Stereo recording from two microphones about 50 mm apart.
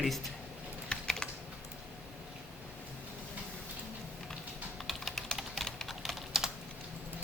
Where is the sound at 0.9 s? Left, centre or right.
Centre.